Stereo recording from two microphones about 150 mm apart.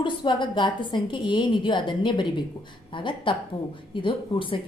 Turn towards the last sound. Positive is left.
turn(degrees=35)  # may be behind; listen again after turning